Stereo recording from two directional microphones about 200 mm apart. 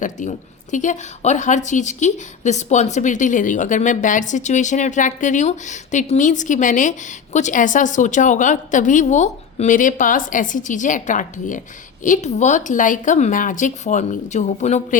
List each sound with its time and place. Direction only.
0.0 s a woman's voice: 40° left (ahead or behind)